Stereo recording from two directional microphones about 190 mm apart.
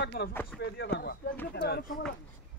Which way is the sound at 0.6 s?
65° left (ahead or behind).